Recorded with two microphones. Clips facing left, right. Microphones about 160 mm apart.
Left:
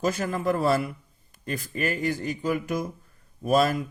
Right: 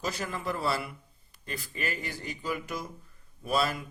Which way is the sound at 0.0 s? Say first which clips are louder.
Left 8 dB; 50° left (ahead or behind).